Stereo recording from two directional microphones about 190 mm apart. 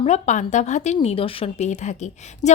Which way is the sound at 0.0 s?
40° left (ahead or behind).